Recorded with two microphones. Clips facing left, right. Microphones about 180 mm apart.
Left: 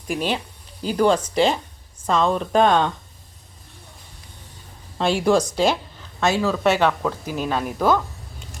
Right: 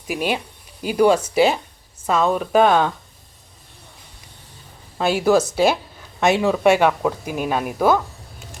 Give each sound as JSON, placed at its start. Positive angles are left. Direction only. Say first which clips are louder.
{"t": 0.1, "sound": "speech", "louder": "right 1 dB", "side_deg": -10}
{"t": 4.9, "sound": "speech", "louder": "right 2 dB", "side_deg": -5}